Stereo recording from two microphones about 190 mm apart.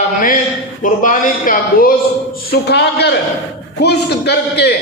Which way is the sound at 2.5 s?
60° left (ahead or behind).